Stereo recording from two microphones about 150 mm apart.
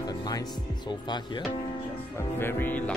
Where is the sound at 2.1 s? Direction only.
15° left (ahead or behind).